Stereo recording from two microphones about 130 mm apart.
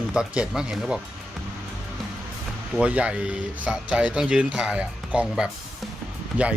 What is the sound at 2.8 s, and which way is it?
Speech, 10° right (ahead or behind).